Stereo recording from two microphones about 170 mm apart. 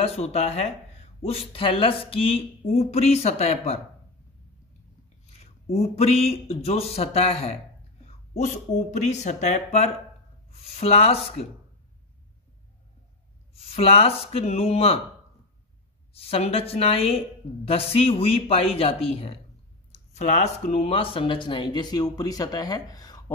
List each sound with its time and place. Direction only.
0.0 s speech: 35° left (ahead or behind)
5.4 s speech: 40° left (ahead or behind)
13.6 s speech: 35° left (ahead or behind)
16.1 s speech: 35° left (ahead or behind)